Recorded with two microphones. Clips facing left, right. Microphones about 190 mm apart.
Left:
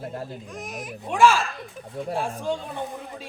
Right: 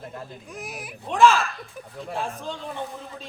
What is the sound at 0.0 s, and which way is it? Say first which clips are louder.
Speech: left 4 dB; 35° left (ahead or behind).